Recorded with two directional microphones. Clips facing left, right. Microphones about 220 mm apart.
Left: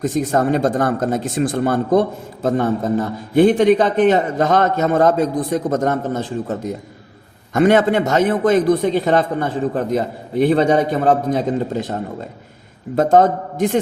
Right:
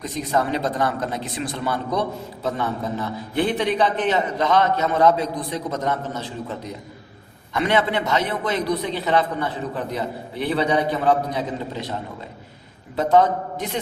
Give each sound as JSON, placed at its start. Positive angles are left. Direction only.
{"t": 0.0, "sound": "speech", "side_deg": 50}
{"t": 13.0, "sound": "speech", "side_deg": 45}